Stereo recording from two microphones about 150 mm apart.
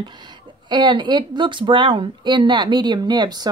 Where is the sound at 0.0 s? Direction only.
30° right (ahead or behind).